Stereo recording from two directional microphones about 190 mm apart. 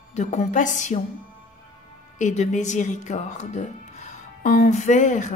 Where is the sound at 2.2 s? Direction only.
40° left (ahead or behind).